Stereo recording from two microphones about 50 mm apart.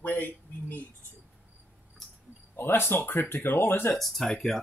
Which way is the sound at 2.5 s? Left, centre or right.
Left.